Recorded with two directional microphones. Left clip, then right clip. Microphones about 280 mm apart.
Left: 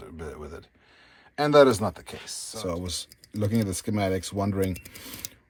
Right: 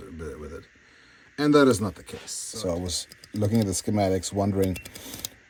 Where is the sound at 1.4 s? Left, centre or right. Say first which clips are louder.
Left 2 dB; centre.